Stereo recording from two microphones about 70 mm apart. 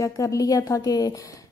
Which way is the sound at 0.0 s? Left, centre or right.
Left.